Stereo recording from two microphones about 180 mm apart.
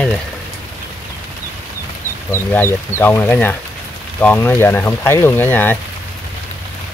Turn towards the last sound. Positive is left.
turn(degrees=10)  # may be behind; listen again after turning